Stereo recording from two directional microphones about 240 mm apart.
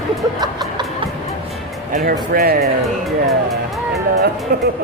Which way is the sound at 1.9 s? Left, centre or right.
Right.